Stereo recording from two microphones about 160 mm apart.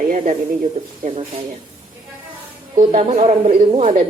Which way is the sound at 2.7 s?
40° right (ahead or behind).